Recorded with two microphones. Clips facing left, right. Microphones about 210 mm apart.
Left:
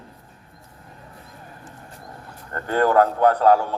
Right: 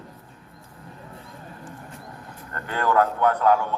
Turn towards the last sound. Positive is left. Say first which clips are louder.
# left 3 dB
turn(degrees=35)  # may be behind; listen again after turning